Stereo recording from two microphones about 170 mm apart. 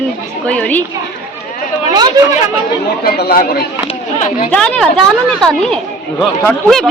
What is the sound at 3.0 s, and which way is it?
Speech, 65° left (ahead or behind).